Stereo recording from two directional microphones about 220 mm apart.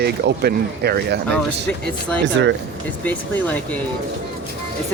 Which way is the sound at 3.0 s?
5° left (ahead or behind).